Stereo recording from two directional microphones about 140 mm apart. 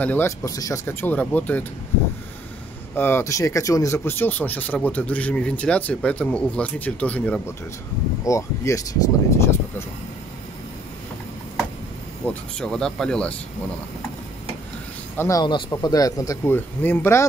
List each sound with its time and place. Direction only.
0.0 s speech: 15° left (ahead or behind)
3.0 s speech: 15° left (ahead or behind)
8.2 s speech: 20° left (ahead or behind)
12.3 s speech: 5° left (ahead or behind)
15.1 s speech: 20° left (ahead or behind)